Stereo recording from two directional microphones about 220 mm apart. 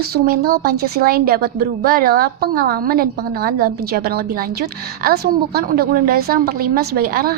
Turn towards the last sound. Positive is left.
turn(degrees=-45)  # may be behind; listen again after turning